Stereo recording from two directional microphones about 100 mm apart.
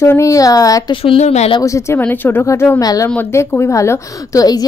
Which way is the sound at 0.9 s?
65° left (ahead or behind).